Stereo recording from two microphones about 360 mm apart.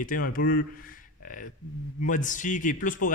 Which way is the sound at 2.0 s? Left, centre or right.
Left.